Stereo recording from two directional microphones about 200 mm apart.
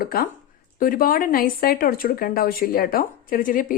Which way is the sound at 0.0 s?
50° left (ahead or behind).